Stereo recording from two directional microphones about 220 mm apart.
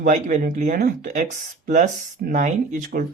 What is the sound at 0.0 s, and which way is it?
Speech, 35° right (ahead or behind).